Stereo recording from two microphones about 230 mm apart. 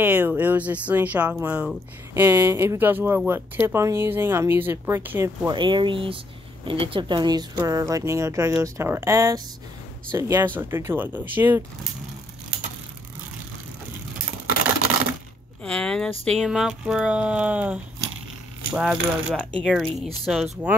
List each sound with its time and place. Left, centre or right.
0.0 s speech: centre
15.6 s speech: centre